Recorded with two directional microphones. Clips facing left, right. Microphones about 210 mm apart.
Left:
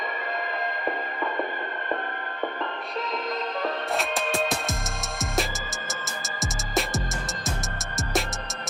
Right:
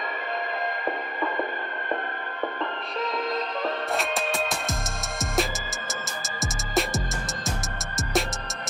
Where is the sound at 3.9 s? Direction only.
Centre (ahead or behind).